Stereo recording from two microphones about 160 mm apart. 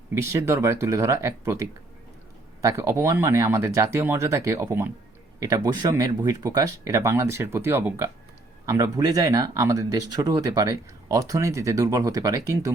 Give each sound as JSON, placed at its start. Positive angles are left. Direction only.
{"t": 0.1, "sound": "speech", "side_deg": -15}